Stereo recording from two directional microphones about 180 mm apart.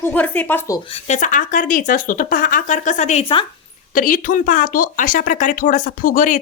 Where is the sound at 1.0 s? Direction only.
45° left (ahead or behind).